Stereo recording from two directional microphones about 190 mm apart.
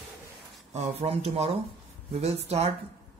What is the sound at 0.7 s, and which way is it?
Speech, 35° right (ahead or behind).